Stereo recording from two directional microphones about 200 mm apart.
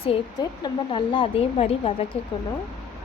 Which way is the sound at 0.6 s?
25° left (ahead or behind).